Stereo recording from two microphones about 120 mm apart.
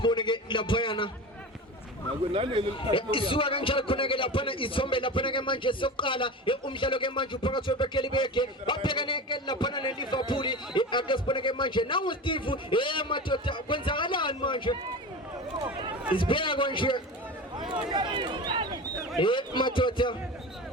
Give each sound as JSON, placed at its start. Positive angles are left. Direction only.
{"t": 0.0, "sound": "a man's voice", "side_deg": 40}
{"t": 2.3, "sound": "a man's voice", "side_deg": -50}
{"t": 2.9, "sound": "a man's voice", "side_deg": 45}
{"t": 16.1, "sound": "a man's voice", "side_deg": 45}
{"t": 17.7, "sound": "speech", "side_deg": -40}
{"t": 19.2, "sound": "a man's voice", "side_deg": 45}